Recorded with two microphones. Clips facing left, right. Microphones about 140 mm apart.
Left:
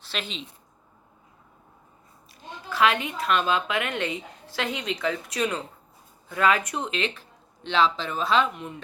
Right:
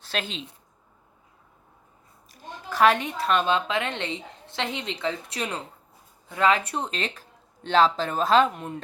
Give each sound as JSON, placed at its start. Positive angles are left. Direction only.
{"t": 0.0, "sound": "a woman's voice", "side_deg": -45}
{"t": 2.3, "sound": "a woman's voice", "side_deg": -40}